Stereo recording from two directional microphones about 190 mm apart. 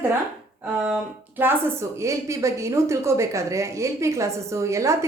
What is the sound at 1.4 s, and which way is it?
A woman's voice, 10° right (ahead or behind).